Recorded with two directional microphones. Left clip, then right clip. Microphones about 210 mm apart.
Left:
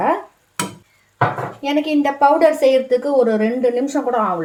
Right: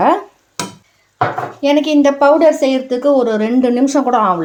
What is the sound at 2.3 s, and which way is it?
A woman's voice, 35° right (ahead or behind).